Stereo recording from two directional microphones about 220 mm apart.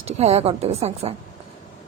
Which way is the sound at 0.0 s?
30° right (ahead or behind).